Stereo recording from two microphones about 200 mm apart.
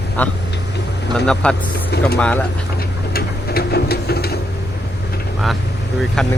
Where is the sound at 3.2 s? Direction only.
50° left (ahead or behind).